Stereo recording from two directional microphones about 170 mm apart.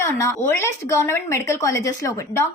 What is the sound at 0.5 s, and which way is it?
A woman's voice, 15° left (ahead or behind).